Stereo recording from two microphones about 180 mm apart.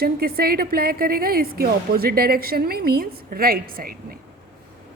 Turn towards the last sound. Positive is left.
turn(degrees=-55)  # may be behind; listen again after turning